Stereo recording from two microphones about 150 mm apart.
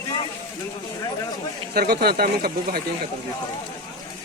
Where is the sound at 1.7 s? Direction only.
90° right.